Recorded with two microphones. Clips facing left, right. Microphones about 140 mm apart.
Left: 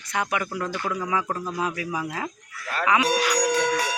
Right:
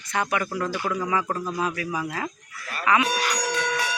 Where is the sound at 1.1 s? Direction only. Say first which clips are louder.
Right 1 dB; 5° left (ahead or behind).